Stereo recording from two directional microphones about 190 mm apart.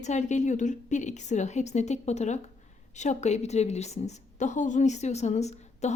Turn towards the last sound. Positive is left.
turn(degrees=35)  # may be behind; listen again after turning